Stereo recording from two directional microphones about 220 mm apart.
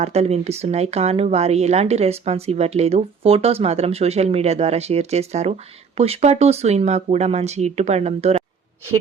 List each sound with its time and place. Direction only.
0.0 s speech: 30° right (ahead or behind)